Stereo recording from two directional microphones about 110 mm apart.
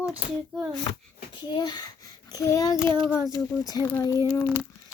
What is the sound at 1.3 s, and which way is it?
A child's voice, 45° left (ahead or behind).